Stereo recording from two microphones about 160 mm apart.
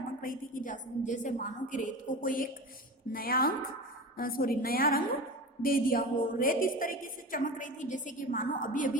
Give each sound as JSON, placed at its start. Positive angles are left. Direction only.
{"t": 0.2, "sound": "a woman's voice", "side_deg": 60}